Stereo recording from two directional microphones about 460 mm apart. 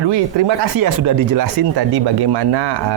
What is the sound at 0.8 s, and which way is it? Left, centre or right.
Speech, right.